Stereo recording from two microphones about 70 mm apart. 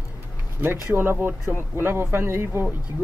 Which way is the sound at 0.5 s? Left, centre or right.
Right.